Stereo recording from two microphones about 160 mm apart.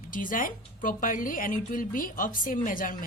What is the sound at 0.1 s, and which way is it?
A woman's voice, 55° left (ahead or behind).